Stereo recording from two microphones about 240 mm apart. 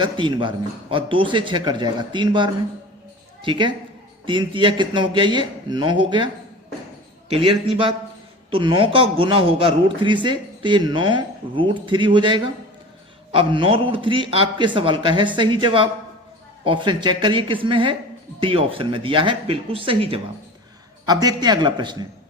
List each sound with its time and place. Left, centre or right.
0.0 s a man's voice: centre